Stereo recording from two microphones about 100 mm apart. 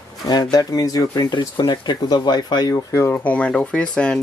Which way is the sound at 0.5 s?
40° left (ahead or behind).